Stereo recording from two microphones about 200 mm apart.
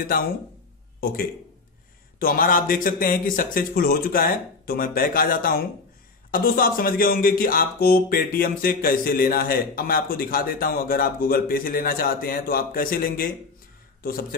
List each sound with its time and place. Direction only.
2.1 s speech: 45° left (ahead or behind)